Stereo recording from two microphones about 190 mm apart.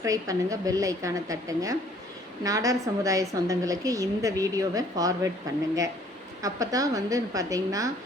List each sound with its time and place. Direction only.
0.0 s a woman's voice: 15° right (ahead or behind)
6.4 s a woman's voice: 20° right (ahead or behind)